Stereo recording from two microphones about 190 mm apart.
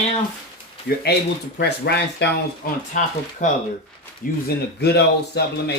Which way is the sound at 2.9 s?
40° left (ahead or behind).